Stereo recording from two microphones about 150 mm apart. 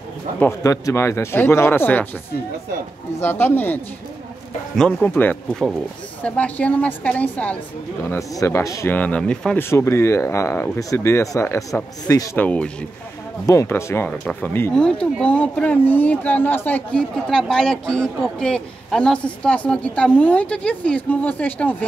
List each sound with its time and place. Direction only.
0.4 s speech: 20° left (ahead or behind)
3.2 s speech: 15° left (ahead or behind)
9.7 s speech: 15° left (ahead or behind)
13.5 s speech: 20° left (ahead or behind)